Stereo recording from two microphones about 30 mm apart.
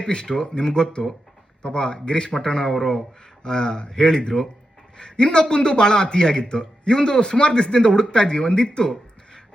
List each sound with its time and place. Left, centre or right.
0.0 s a man's voice: left